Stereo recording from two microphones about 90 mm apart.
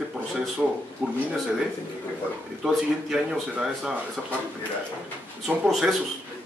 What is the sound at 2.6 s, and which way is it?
Speech, 5° right (ahead or behind).